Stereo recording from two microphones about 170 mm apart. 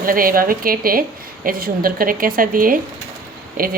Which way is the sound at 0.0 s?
55° right (ahead or behind).